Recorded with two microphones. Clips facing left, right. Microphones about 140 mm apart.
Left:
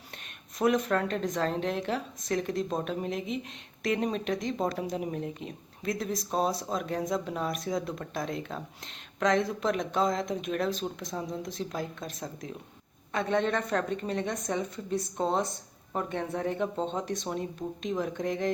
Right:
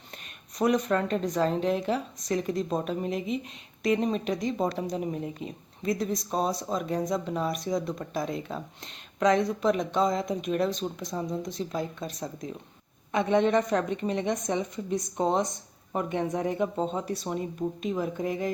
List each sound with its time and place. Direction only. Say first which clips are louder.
0.6 s speech: right 1 dB; centre (ahead or behind)
13.1 s speech: right 5 dB; 15° right (ahead or behind)